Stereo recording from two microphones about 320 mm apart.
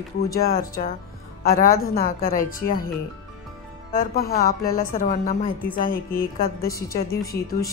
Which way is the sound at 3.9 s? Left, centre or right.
Left.